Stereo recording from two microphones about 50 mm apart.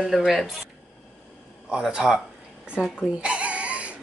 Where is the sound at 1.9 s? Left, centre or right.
Centre.